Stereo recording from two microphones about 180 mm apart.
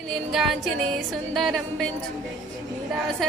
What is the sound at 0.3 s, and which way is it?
Music, centre (ahead or behind).